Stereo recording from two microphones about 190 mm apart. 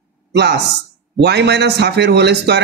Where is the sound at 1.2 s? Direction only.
60° right (ahead or behind).